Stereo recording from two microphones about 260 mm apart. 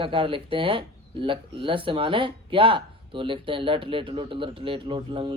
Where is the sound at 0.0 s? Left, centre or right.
Centre.